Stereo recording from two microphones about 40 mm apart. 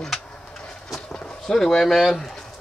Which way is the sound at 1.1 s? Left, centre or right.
Centre.